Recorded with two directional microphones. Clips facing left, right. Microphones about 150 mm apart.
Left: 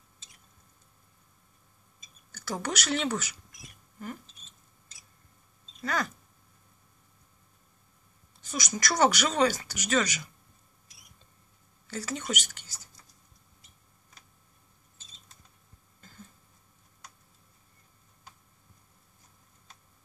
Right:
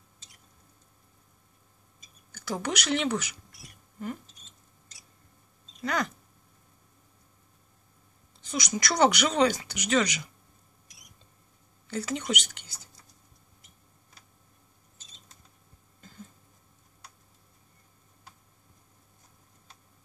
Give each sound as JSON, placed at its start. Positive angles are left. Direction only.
{"t": 2.3, "sound": "speech", "side_deg": -15}
{"t": 5.8, "sound": "speech", "side_deg": -20}
{"t": 8.5, "sound": "speech", "side_deg": -20}
{"t": 11.9, "sound": "speech", "side_deg": -15}